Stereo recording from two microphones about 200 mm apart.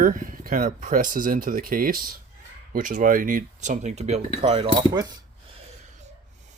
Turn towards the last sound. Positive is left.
turn(degrees=-20)  # may be behind; listen again after turning